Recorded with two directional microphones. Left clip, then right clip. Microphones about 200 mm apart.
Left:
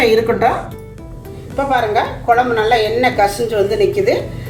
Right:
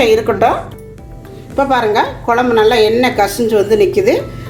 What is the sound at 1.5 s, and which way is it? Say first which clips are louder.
A woman's voice: right 3 dB; 40° right (ahead or behind).